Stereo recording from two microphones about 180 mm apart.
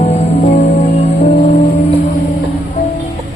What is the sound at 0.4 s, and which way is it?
Music, 40° left (ahead or behind).